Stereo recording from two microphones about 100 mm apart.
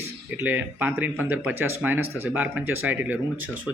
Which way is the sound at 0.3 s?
20° right (ahead or behind).